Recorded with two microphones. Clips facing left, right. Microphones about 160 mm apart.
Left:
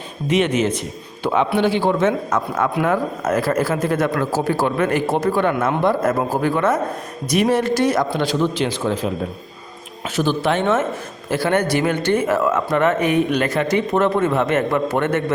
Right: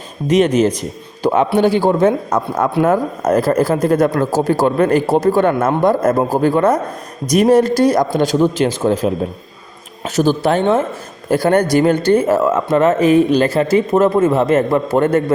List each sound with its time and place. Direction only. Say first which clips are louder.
0.3 s a man's voice: right 5 dB; 40° right (ahead or behind)
10.2 s a man's voice: right 5 dB; 40° right (ahead or behind)